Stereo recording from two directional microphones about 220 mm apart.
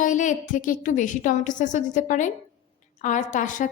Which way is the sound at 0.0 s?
35° left (ahead or behind).